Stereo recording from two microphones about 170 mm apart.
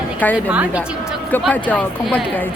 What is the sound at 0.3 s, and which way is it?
Speech, 10° right (ahead or behind).